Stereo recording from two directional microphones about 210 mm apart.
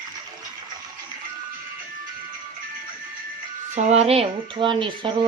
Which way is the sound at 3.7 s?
30° right (ahead or behind).